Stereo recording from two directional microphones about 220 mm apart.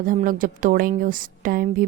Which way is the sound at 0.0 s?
40° right (ahead or behind).